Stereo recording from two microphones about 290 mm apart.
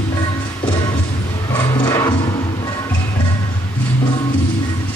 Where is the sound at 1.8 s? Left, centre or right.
Centre.